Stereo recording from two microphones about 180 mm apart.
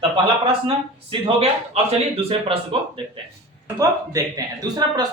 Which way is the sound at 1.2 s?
35° right (ahead or behind).